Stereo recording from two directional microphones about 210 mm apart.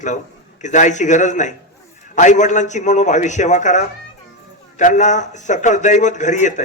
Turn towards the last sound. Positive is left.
turn(degrees=35)  # may be behind; listen again after turning